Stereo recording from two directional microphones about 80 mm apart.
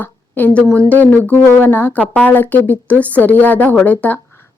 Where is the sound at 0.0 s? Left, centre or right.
Left.